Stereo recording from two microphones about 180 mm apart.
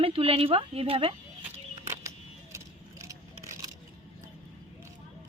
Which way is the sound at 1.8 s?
15° right (ahead or behind).